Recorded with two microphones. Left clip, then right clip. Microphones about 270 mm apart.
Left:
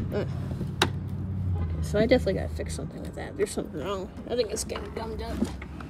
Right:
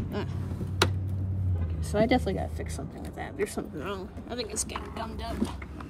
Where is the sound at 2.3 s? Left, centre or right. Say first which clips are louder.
Left 1 dB; right.